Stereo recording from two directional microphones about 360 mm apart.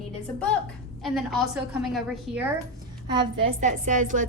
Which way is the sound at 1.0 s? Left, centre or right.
Centre.